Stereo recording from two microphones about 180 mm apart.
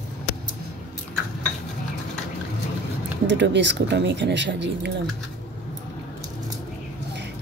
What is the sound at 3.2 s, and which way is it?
A woman's voice, 75° right (ahead or behind).